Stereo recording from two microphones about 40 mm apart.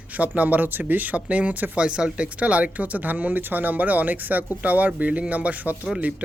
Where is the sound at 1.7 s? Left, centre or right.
Right.